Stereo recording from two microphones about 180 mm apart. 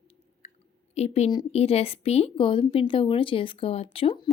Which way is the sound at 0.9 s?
35° left (ahead or behind).